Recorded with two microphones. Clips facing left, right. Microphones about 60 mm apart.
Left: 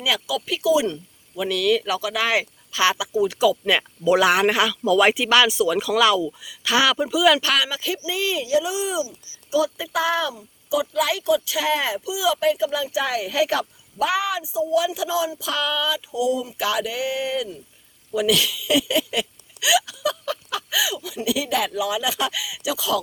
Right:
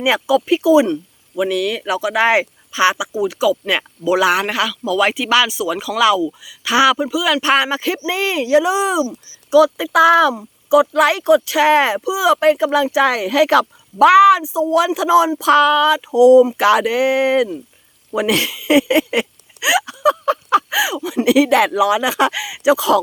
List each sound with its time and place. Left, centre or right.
0.0 s speech: right
1.4 s speech: centre
7.4 s speech: right
9.5 s speech: right
18.1 s speech: right